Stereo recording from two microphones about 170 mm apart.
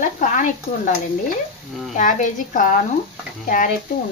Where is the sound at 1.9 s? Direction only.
50° left (ahead or behind).